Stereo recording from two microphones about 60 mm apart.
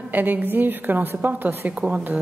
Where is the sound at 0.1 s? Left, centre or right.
Right.